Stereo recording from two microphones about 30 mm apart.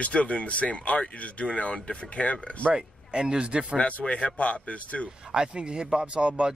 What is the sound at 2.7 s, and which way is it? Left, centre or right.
Speech, right.